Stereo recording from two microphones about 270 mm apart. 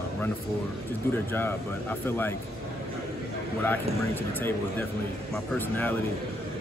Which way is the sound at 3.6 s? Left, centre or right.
Centre.